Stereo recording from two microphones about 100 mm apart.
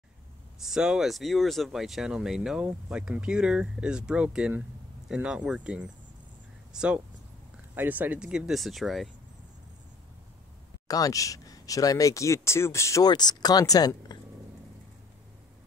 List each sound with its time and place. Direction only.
0.6 s speech: 5° right (ahead or behind)
10.9 s speech: 35° left (ahead or behind)
13.0 s speech: 45° left (ahead or behind)